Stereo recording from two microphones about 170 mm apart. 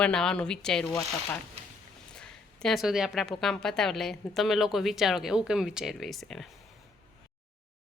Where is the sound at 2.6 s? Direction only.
Centre (ahead or behind).